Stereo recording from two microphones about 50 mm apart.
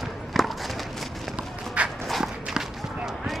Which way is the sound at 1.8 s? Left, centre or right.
Right.